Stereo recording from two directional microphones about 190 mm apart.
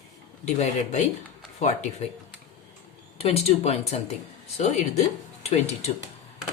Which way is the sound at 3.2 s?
30° left (ahead or behind).